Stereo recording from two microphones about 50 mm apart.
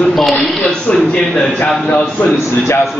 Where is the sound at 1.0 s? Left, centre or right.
Centre.